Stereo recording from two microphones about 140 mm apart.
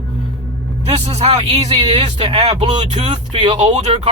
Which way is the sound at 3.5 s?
55° right (ahead or behind).